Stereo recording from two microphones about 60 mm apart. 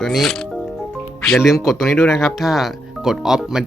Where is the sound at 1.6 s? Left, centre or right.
Centre.